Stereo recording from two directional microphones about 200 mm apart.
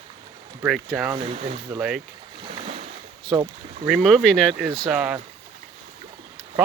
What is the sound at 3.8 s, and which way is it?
Speech, centre (ahead or behind).